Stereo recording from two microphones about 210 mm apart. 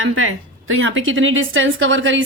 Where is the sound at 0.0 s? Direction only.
70° right (ahead or behind).